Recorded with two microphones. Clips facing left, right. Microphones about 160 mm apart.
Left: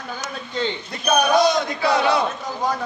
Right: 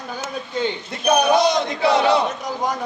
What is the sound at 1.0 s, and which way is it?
Speech, 20° right (ahead or behind).